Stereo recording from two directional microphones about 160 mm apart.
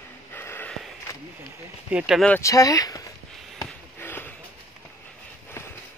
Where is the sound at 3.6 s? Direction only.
15° left (ahead or behind).